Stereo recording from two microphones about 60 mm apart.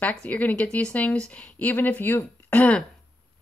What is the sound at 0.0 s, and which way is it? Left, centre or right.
Speech, left.